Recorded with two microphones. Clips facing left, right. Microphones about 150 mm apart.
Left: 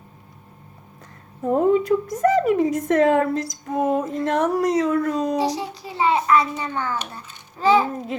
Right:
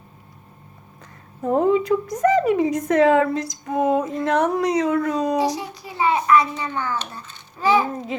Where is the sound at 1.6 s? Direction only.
45° left (ahead or behind).